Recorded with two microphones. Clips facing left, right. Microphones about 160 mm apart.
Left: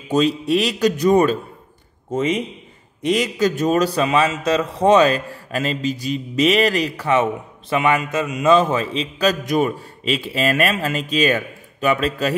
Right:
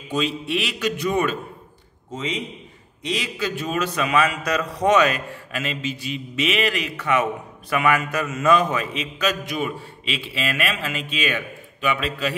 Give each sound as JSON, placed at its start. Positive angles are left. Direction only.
{"t": 0.1, "sound": "a man's voice", "side_deg": 40}
{"t": 2.0, "sound": "a man's voice", "side_deg": 50}